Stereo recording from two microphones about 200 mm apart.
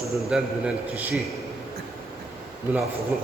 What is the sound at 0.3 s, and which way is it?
Speech, 5° right (ahead or behind).